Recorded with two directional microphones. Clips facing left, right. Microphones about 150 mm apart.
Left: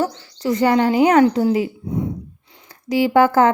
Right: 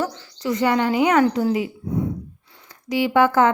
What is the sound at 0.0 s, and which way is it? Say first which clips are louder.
Speech: left 4 dB; 35° left (ahead or behind).